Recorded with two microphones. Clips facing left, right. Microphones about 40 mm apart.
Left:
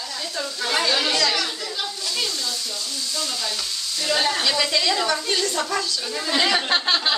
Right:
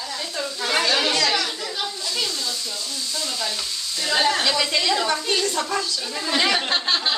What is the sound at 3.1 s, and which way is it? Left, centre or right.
Frying, centre.